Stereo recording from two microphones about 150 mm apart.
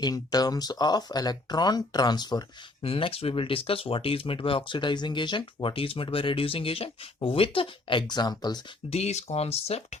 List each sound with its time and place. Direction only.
0.0 s speech: 25° left (ahead or behind)
2.8 s speech: 40° left (ahead or behind)
8.9 s speech: 45° left (ahead or behind)